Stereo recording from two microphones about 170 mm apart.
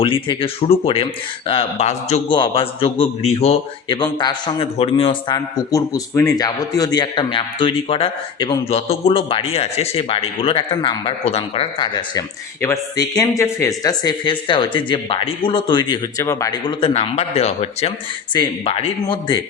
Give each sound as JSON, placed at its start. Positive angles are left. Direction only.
{"t": 0.0, "sound": "a man's voice", "side_deg": 30}
{"t": 2.3, "sound": "a man's voice", "side_deg": 30}
{"t": 5.5, "sound": "a man's voice", "side_deg": 20}